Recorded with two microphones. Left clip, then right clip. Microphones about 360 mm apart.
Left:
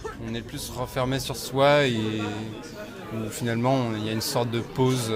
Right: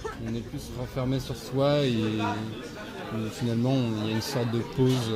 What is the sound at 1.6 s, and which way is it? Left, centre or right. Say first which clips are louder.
Speech: left 6 dB; left.